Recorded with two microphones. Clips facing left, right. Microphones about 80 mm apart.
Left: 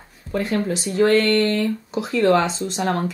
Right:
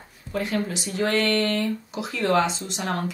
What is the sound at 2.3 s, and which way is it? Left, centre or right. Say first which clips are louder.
Speech: left 3 dB; left.